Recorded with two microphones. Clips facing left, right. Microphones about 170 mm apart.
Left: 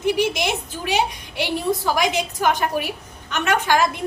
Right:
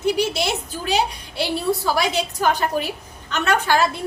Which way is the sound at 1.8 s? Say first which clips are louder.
Left 2 dB; 15° left (ahead or behind).